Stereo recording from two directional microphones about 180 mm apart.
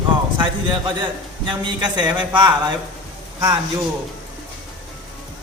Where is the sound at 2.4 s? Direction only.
25° right (ahead or behind).